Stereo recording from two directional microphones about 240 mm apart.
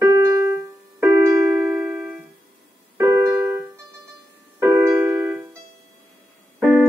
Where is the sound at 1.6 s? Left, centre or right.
Centre.